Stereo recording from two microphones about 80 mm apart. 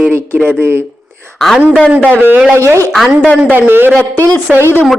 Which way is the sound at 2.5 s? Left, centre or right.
Right.